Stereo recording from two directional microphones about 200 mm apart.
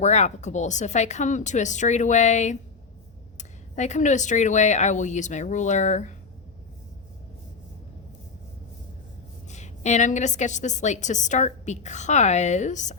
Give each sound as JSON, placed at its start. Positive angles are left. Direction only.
{"t": 0.0, "sound": "a woman's voice", "side_deg": 35}
{"t": 9.5, "sound": "a woman's voice", "side_deg": 35}